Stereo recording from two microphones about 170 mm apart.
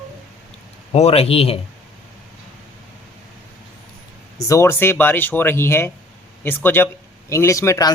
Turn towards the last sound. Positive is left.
turn(degrees=20)  # may be behind; listen again after turning